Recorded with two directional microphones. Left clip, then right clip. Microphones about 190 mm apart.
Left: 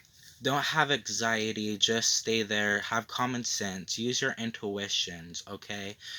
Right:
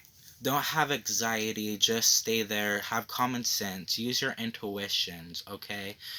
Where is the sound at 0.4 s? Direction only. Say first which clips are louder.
Left 1 dB; 40° left (ahead or behind).